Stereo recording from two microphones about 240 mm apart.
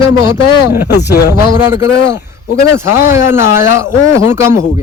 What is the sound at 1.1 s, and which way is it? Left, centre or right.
Speech, left.